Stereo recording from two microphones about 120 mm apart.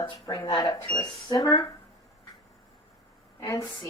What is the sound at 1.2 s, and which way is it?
Speech, 30° left (ahead or behind).